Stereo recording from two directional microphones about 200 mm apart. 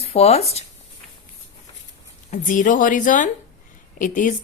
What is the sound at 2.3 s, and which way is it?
Speech, 40° left (ahead or behind).